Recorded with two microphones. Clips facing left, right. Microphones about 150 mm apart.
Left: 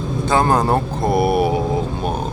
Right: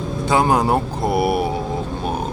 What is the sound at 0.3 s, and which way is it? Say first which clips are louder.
Speech: even; 10° right (ahead or behind).